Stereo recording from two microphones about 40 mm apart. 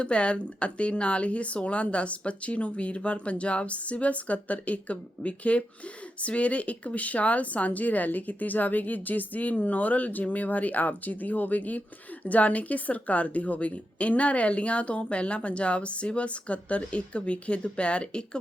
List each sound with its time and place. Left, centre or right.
0.0 s a woman's voice: left